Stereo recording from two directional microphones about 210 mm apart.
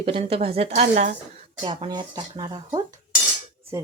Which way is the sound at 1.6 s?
25° right (ahead or behind).